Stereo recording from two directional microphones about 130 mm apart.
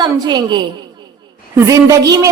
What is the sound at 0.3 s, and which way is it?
A woman's voice, 35° right (ahead or behind).